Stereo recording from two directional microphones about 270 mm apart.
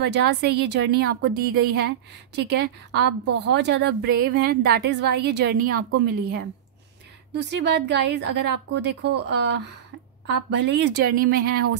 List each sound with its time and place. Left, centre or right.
0.0 s speech: right